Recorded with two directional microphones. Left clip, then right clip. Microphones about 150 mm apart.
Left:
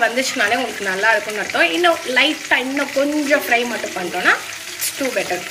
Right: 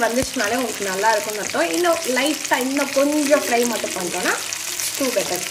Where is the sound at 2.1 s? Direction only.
35° right (ahead or behind).